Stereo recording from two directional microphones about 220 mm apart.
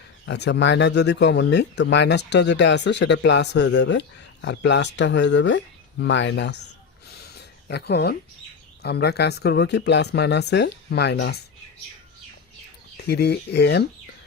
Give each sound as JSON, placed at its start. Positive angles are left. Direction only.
{"t": 0.3, "sound": "speech", "side_deg": 50}
{"t": 7.2, "sound": "a sound", "side_deg": 50}
{"t": 8.8, "sound": "speech", "side_deg": 50}
{"t": 13.0, "sound": "speech", "side_deg": 50}